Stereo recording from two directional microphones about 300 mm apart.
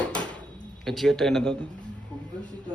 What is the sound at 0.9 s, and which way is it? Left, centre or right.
Speech, centre.